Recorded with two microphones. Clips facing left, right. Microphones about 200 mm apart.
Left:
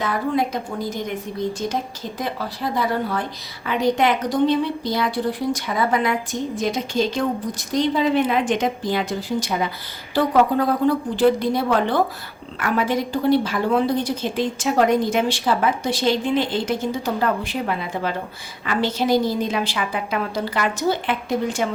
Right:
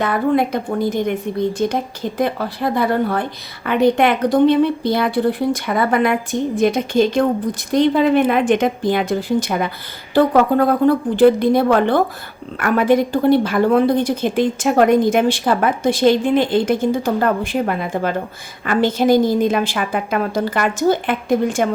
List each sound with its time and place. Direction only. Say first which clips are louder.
0.0 s a woman's voice: right 5 dB; 60° right (ahead or behind)